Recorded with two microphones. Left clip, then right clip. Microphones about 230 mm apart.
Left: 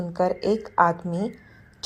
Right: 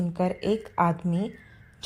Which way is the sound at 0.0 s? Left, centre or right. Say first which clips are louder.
Left 5 dB; right.